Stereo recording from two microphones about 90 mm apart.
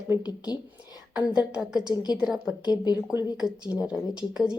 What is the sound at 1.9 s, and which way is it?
Speech, 50° left (ahead or behind).